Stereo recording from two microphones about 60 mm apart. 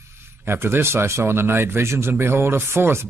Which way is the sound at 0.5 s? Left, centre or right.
Right.